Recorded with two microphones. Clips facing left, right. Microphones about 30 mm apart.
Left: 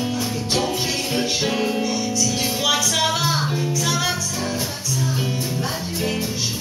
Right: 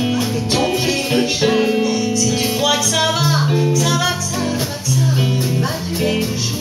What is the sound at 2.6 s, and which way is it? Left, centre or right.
Music, centre.